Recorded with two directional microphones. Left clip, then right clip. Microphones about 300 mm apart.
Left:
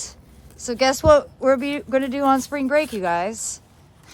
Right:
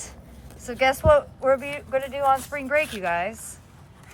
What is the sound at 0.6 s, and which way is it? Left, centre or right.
Speech, centre.